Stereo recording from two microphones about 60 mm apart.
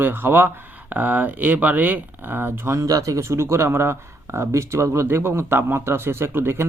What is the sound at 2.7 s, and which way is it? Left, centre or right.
Speech, right.